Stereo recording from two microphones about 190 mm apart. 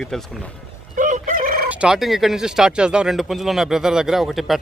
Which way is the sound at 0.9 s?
40° right (ahead or behind).